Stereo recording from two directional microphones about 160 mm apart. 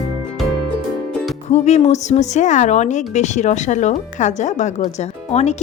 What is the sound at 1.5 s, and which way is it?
Speech, 45° left (ahead or behind).